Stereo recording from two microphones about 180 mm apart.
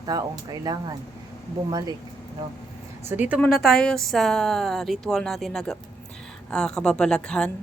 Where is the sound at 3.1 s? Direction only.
10° right (ahead or behind).